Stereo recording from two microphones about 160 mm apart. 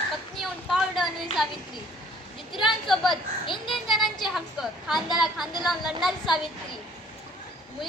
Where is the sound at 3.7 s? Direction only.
Centre (ahead or behind).